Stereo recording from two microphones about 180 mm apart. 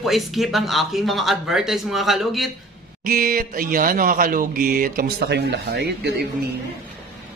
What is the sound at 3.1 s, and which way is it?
A man's voice, 50° right (ahead or behind).